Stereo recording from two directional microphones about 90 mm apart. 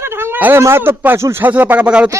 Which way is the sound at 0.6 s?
25° right (ahead or behind).